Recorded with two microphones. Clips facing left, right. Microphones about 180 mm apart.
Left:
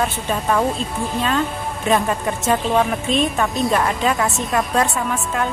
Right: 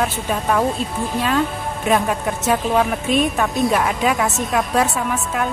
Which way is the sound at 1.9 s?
Centre (ahead or behind).